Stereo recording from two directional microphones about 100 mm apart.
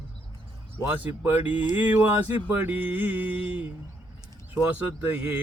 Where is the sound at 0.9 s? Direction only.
20° right (ahead or behind).